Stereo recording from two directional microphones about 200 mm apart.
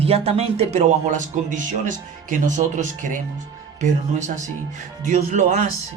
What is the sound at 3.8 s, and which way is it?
Speech, 40° right (ahead or behind).